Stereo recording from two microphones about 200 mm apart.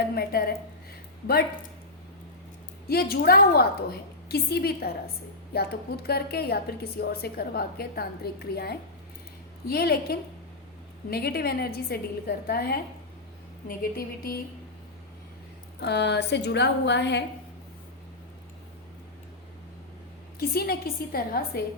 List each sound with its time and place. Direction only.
0.1 s a woman's voice: 50° left (ahead or behind)
2.9 s a woman's voice: 50° left (ahead or behind)
15.8 s a woman's voice: 60° left (ahead or behind)
20.4 s a woman's voice: 50° left (ahead or behind)